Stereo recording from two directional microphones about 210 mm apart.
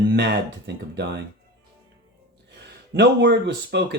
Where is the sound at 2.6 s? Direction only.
55° right (ahead or behind).